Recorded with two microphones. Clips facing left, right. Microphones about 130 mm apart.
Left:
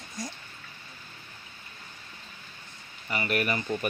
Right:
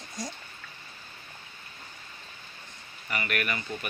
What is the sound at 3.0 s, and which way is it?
Speech, 25° left (ahead or behind).